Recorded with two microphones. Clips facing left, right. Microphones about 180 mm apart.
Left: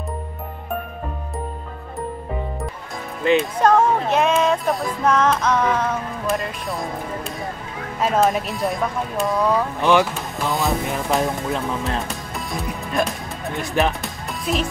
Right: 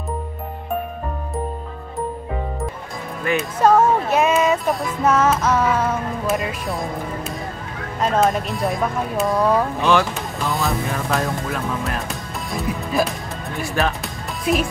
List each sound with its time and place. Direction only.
3.3 s speech: 20° left (ahead or behind)
3.6 s music: 5° right (ahead or behind)
8.0 s music: 5° left (ahead or behind)
9.8 s speech: 15° left (ahead or behind)
12.5 s music: centre (ahead or behind)
13.6 s speech: 20° left (ahead or behind)
14.0 s music: centre (ahead or behind)